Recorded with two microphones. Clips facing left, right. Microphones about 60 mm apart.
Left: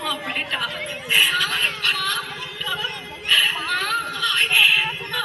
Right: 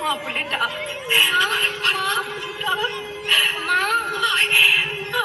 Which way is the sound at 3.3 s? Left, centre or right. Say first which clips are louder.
Even; right.